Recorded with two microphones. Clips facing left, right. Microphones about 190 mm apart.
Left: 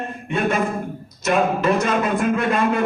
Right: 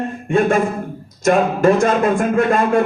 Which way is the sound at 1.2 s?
50° right (ahead or behind).